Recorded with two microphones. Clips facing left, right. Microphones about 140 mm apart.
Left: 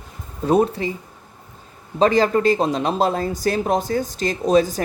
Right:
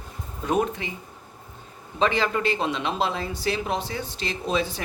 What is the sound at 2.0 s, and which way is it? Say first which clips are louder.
Speech: left 7 dB; 40° left (ahead or behind).